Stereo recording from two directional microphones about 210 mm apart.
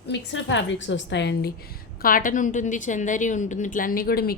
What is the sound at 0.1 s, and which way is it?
A woman's voice, 60° left (ahead or behind).